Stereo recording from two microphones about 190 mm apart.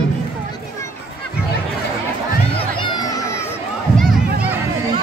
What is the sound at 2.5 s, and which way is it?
Crowd, 25° left (ahead or behind).